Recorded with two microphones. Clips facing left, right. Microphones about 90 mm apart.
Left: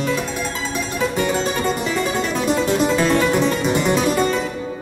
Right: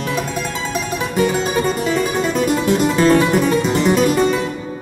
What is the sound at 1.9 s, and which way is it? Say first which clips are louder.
Music: right 3 dB; 10° right (ahead or behind).